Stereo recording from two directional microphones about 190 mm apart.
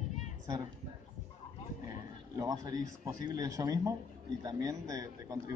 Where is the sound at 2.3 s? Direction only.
20° right (ahead or behind).